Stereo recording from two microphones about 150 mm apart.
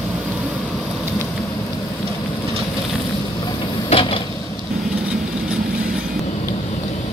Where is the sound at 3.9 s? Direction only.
40° left (ahead or behind).